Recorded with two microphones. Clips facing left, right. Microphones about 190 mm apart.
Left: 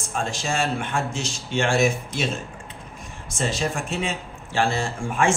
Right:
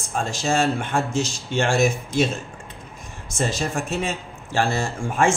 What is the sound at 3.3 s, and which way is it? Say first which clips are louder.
Speech: right 1 dB; 45° right (ahead or behind).